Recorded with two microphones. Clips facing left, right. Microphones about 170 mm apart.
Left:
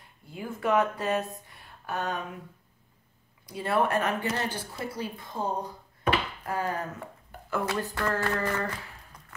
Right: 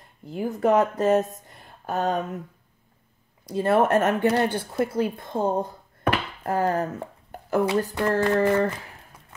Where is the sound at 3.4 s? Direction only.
45° right (ahead or behind).